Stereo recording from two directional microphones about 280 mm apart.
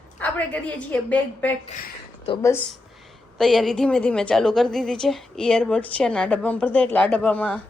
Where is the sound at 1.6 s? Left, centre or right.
Left.